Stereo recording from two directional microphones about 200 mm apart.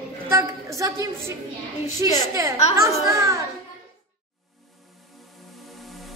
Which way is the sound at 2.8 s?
15° right (ahead or behind).